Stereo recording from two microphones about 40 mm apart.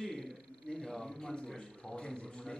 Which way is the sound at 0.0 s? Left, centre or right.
Centre.